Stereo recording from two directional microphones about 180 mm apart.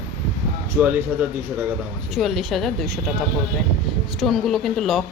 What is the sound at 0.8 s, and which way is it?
Speech, 10° right (ahead or behind).